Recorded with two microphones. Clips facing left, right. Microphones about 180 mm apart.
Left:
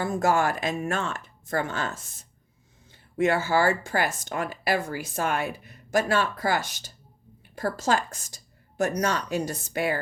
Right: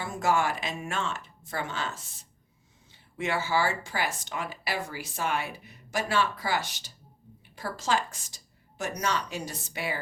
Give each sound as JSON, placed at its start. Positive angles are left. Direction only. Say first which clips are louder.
{"t": 0.0, "sound": "speech", "louder": "left 4 dB", "side_deg": 45}